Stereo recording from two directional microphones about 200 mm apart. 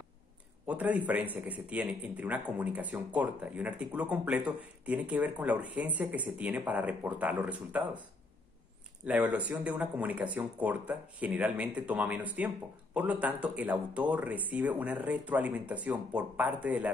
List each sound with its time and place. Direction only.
0.7 s a man's voice: 5° right (ahead or behind)
9.0 s a man's voice: 5° right (ahead or behind)